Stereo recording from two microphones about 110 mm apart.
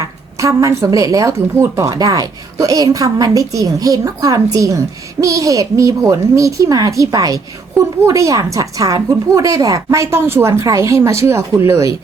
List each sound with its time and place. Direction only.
0.3 s a woman's voice: 30° right (ahead or behind)